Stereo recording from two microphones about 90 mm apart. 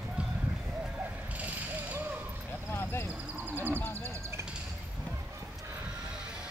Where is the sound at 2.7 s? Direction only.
25° left (ahead or behind).